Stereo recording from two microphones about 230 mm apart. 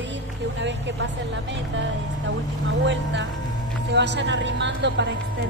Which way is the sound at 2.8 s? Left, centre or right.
Right.